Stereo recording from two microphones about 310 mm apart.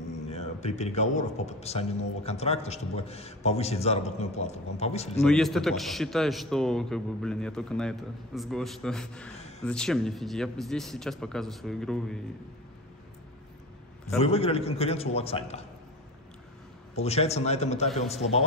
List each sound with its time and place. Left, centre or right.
0.3 s a man's voice: left
5.2 s a man's voice: centre
14.0 s a man's voice: centre
16.9 s a man's voice: centre